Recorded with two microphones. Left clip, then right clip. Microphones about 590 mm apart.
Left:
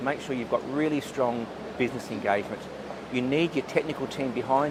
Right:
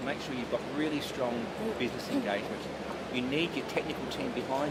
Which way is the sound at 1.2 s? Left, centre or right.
Left.